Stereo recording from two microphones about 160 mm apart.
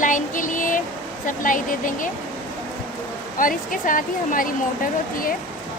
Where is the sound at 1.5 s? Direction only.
55° left (ahead or behind).